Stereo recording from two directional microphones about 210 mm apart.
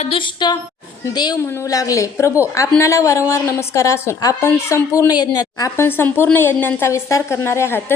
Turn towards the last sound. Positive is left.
turn(degrees=10)  # may be behind; listen again after turning